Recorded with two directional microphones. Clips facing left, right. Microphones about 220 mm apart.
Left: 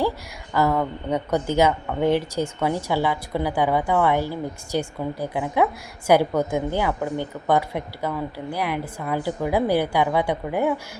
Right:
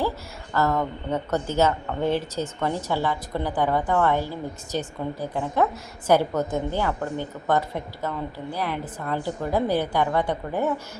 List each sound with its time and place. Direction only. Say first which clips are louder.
0.5 s speech: left 2 dB; 10° left (ahead or behind)